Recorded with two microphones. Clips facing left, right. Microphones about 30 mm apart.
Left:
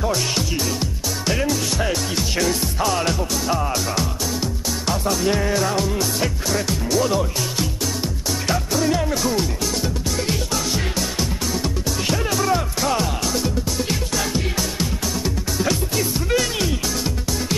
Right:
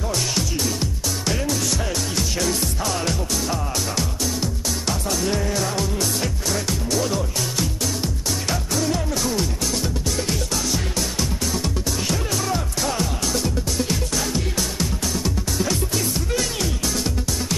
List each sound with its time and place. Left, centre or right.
0.6 s music: centre
1.6 s music: left
2.4 s music: centre
5.6 s speech: centre
7.3 s music: centre